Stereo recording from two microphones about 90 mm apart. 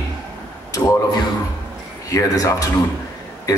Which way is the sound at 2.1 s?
40° left (ahead or behind).